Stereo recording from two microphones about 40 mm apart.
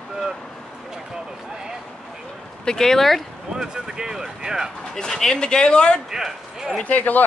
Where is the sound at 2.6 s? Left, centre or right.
Centre.